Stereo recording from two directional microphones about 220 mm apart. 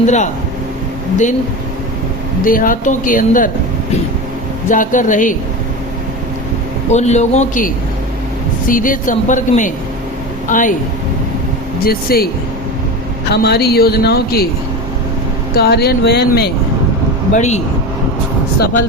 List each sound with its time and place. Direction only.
0.0 s speech: 30° left (ahead or behind)
2.4 s speech: 40° left (ahead or behind)
4.7 s speech: 35° left (ahead or behind)
6.9 s speech: 30° left (ahead or behind)
11.9 s speech: 45° left (ahead or behind)
13.3 s speech: 45° left (ahead or behind)
15.5 s speech: 45° left (ahead or behind)
17.3 s speech: 30° left (ahead or behind)